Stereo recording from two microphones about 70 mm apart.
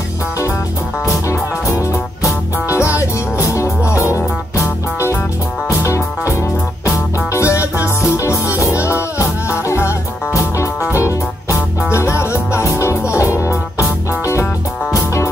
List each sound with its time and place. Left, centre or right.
1.0 s music: left
5.7 s music: left